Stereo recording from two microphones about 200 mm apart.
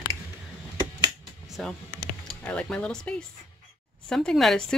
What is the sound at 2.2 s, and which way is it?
Speech, 5° left (ahead or behind).